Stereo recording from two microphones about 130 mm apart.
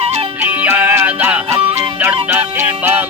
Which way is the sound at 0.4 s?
10° right (ahead or behind).